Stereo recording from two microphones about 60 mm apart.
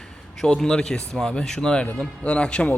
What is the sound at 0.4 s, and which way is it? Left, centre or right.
A man's voice, centre.